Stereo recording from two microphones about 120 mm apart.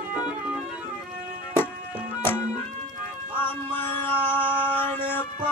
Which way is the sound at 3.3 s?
15° left (ahead or behind).